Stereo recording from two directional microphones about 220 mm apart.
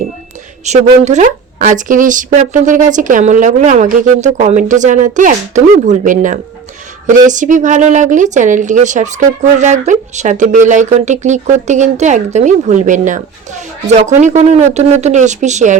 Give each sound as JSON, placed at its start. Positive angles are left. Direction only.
{"t": 0.6, "sound": "speech", "side_deg": -30}